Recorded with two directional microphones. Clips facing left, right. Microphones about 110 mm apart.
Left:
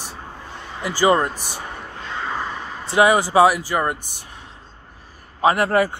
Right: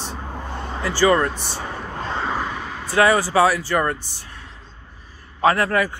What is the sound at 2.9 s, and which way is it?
Speech, 20° left (ahead or behind).